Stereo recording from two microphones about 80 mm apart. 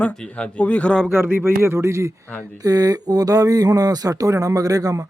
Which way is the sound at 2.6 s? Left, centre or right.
Right.